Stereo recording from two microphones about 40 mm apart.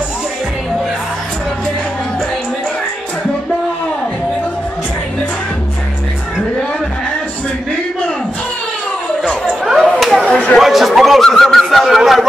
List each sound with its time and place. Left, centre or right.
9.2 s chatter: left
9.9 s chatter: centre
10.2 s chatter: left
10.6 s chatter: centre
11.8 s speech: centre